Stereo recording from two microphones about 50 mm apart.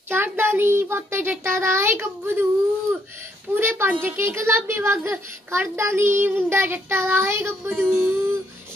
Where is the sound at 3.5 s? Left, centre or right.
Right.